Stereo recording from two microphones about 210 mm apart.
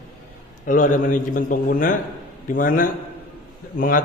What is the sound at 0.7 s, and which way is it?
Speech, 40° left (ahead or behind).